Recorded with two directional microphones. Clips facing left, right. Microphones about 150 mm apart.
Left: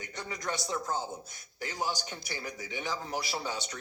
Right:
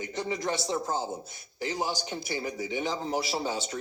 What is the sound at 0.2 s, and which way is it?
A man's voice, 25° right (ahead or behind).